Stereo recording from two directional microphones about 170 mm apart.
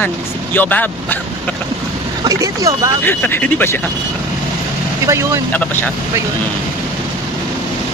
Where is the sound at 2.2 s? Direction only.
20° right (ahead or behind).